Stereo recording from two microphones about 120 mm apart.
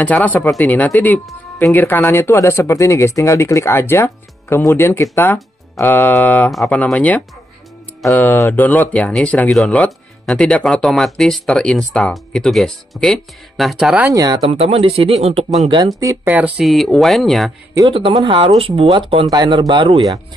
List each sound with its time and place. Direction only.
0.0 s speech: 15° left (ahead or behind); by 14.0 s 5° right (ahead or behind)
14.0 s speech: 30° right (ahead or behind)
14.4 s speech: 55° right (ahead or behind)
16.3 s speech: 15° right (ahead or behind)
16.6 s speech: centre (ahead or behind)
17.9 s speech: 45° right (ahead or behind)
19.2 s speech: 35° right (ahead or behind)